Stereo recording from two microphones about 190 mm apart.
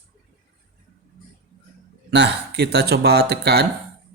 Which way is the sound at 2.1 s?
60° right (ahead or behind).